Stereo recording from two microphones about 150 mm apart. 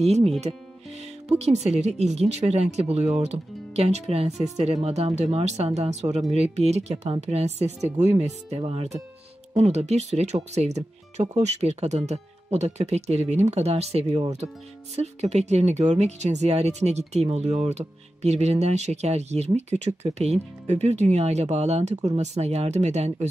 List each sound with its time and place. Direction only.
0.0 s speech: 45° right (ahead or behind)
1.3 s speech: 45° right (ahead or behind)